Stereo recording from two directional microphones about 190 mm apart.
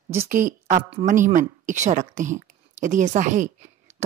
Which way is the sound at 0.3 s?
40° right (ahead or behind).